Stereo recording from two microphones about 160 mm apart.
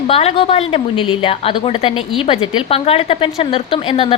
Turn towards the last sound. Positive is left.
turn(degrees=35)  # may be behind; listen again after turning